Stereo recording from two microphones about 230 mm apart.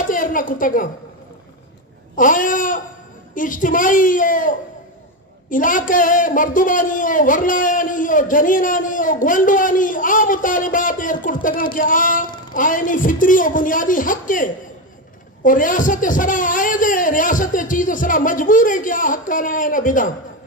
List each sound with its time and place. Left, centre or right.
0.0 s a woman's voice: left
2.1 s a man's voice: left